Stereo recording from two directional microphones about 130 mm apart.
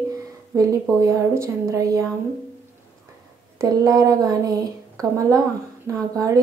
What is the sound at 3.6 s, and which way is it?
Speech, 25° right (ahead or behind).